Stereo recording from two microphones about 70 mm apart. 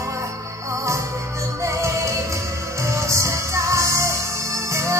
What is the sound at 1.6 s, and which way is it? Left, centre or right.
Music, right.